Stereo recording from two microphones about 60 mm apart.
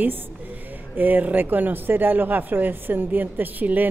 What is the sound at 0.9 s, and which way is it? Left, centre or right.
Speech, right.